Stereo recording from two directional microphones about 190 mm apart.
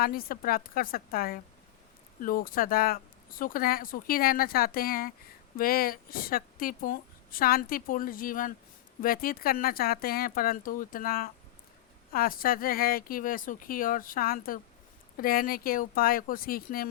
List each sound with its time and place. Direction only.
0.0 s a woman's voice: 50° left (ahead or behind)